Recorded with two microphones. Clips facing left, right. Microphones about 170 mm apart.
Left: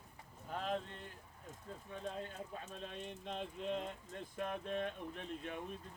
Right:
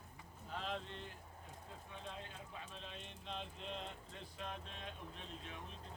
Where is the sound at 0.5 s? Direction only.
45° left (ahead or behind).